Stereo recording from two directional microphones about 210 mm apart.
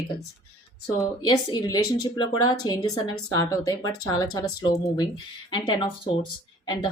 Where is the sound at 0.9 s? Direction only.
20° left (ahead or behind).